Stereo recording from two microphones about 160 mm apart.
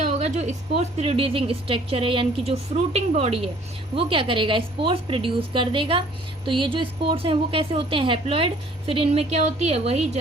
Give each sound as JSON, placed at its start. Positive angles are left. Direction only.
{"t": 0.0, "sound": "a woman's voice", "side_deg": -45}